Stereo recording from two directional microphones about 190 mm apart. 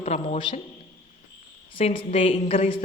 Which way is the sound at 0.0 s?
35° left (ahead or behind).